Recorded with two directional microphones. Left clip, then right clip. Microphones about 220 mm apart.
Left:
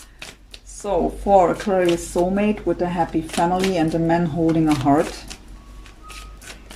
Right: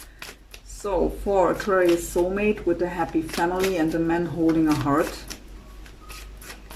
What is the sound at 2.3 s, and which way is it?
Speech, 25° left (ahead or behind).